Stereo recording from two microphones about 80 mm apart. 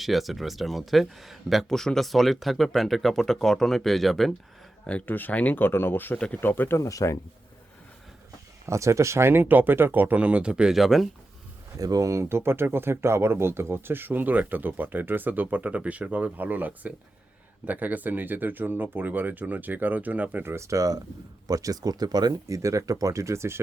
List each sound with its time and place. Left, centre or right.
0.0 s speech: centre
4.9 s speech: centre
6.7 s speech: left
8.6 s speech: right; by 11.1 s centre
11.8 s speech: right
22.4 s speech: right